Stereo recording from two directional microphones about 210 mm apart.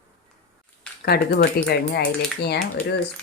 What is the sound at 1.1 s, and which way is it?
Speech, 45° left (ahead or behind).